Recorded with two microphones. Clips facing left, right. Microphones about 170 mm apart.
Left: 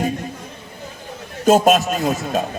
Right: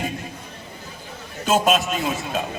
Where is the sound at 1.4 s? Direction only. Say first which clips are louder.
Left 6 dB; 45° left (ahead or behind).